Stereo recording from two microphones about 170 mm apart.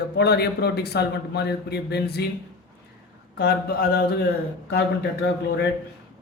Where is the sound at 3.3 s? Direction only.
65° left (ahead or behind).